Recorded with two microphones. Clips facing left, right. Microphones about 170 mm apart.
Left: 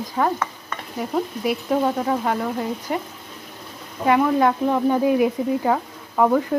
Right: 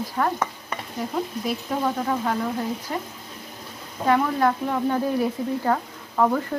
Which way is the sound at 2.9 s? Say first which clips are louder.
Left 4 dB; 15° left (ahead or behind).